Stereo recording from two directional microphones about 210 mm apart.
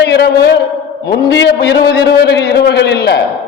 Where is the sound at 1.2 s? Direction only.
50° left (ahead or behind).